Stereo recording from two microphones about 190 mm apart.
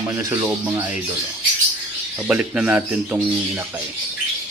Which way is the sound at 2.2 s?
5° right (ahead or behind).